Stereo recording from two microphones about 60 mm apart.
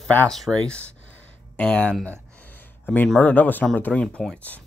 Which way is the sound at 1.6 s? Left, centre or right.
Centre.